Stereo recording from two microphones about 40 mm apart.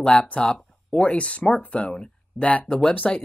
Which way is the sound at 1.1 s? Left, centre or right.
Left.